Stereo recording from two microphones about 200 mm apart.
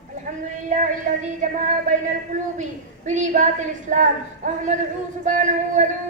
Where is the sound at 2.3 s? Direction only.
35° right (ahead or behind).